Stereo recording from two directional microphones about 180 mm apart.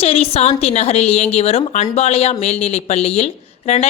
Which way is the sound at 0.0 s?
30° left (ahead or behind).